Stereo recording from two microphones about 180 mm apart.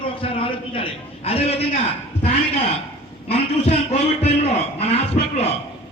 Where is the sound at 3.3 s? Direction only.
35° left (ahead or behind).